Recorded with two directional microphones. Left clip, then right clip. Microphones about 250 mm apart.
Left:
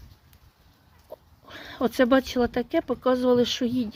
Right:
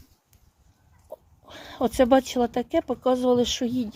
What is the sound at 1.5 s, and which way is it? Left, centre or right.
Speech, centre.